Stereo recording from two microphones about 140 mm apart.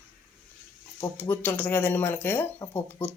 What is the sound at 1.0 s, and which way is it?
Speech, 15° left (ahead or behind).